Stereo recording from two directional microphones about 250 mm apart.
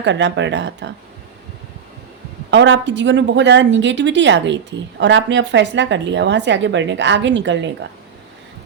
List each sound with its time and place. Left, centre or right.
0.0 s a woman's voice: right
2.5 s a woman's voice: right